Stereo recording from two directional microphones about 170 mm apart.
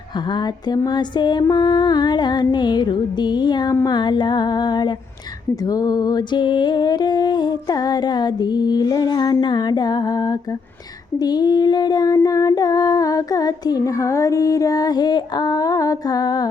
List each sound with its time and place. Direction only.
0.3 s female singing: 25° left (ahead or behind)